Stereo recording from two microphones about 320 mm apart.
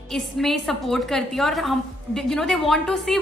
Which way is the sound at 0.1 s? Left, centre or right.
Centre.